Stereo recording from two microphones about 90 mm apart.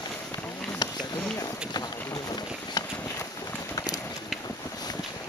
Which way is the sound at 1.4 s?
45° left (ahead or behind).